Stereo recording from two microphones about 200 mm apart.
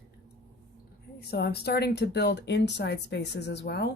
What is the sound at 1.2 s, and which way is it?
Speech, 50° left (ahead or behind).